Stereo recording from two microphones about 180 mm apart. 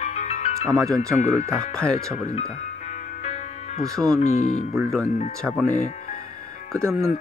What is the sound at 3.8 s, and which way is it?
Speech, centre (ahead or behind).